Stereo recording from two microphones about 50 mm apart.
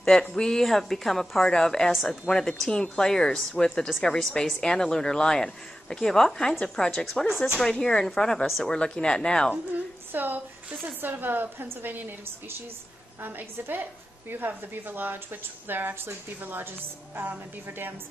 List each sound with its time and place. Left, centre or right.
0.0 s a woman's voice: centre
6.6 s a woman's voice: centre
7.2 s a woman's voice: centre
10.1 s a woman's voice: right
17.1 s speech: right
17.6 s speech: right